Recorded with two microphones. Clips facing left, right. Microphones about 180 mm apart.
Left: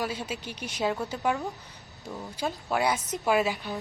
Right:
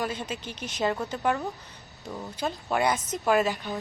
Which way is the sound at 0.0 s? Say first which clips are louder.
Right 1 dB; 10° left (ahead or behind).